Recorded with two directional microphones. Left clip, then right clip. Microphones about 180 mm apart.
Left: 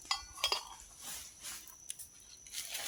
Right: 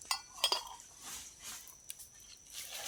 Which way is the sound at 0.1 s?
10° right (ahead or behind).